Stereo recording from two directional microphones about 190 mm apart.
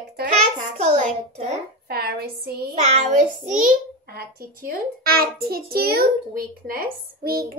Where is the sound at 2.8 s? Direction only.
35° right (ahead or behind).